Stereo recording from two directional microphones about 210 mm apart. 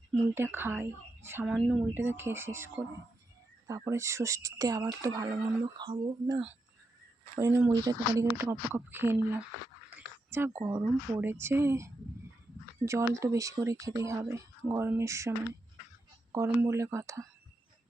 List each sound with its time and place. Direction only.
0.3 s speech: 10° right (ahead or behind)
10.6 s speech: 15° right (ahead or behind)
16.3 s speech: 10° right (ahead or behind)